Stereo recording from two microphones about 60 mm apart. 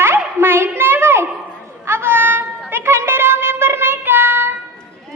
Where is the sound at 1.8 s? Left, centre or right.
Right.